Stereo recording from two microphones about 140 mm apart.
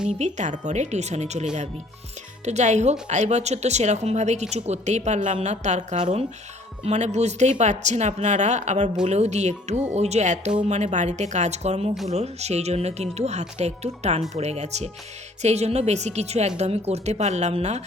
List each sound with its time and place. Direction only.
0.2 s a woman's voice: 60° right (ahead or behind)